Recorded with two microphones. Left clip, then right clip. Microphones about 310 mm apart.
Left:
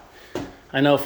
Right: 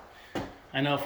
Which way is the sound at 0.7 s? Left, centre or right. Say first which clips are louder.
Left 10 dB; centre.